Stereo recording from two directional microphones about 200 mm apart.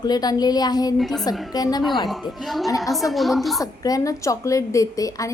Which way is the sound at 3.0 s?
Centre (ahead or behind).